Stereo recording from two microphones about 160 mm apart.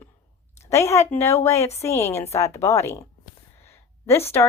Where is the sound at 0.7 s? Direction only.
15° left (ahead or behind).